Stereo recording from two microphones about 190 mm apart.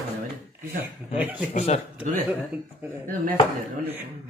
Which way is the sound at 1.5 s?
35° left (ahead or behind).